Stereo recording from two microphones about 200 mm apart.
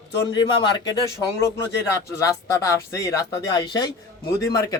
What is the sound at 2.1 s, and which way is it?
Speech, 15° left (ahead or behind).